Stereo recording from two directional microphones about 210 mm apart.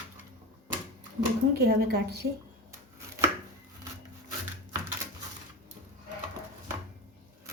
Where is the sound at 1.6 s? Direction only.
50° right (ahead or behind).